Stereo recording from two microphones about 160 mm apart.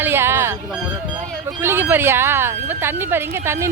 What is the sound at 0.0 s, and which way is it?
Music, 15° right (ahead or behind).